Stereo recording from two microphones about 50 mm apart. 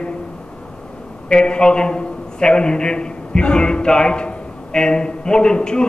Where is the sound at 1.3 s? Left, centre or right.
Centre.